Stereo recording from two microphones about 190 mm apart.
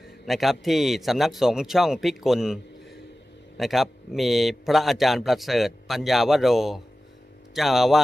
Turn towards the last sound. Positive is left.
turn(degrees=0)  # may be behind; listen again after turning